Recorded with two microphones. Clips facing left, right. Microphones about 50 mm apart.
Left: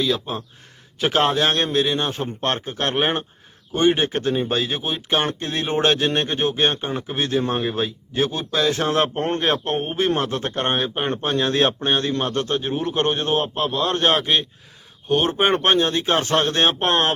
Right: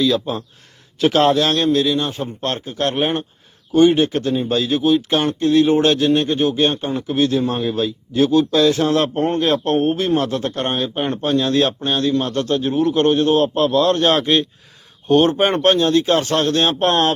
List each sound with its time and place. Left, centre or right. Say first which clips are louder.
0.1 s speech: right 4 dB; centre
0.9 s a man's voice: right 5 dB; left
9.2 s a man's voice: right 4 dB; left
9.6 s speech: right 7 dB; centre
10.2 s a man's voice: right 3 dB; left; by 15.4 s centre
15.6 s a man's voice: right 4 dB; left
16.8 s speech: right 3 dB; centre